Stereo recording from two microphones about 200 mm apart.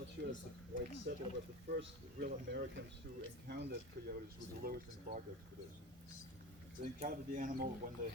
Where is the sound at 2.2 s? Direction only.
50° right (ahead or behind).